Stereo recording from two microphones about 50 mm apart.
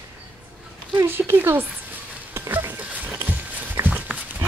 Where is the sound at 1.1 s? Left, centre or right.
Right.